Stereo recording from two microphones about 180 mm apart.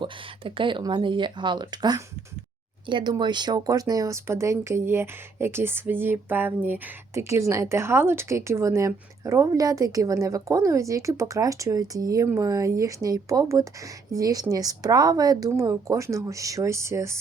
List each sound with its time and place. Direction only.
0.0 s speech: 30° right (ahead or behind)